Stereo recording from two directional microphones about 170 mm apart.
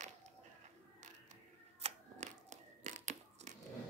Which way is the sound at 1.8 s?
40° right (ahead or behind).